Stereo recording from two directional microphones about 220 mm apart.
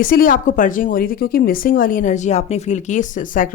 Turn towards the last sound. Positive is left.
turn(degrees=35)  # may be behind; listen again after turning